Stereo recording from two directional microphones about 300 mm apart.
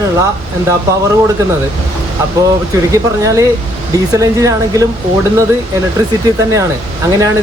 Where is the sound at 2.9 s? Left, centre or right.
Centre.